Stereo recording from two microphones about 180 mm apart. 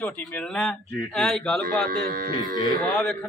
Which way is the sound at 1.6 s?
55° right (ahead or behind).